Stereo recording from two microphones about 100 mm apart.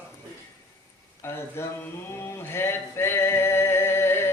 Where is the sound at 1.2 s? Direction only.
25° left (ahead or behind).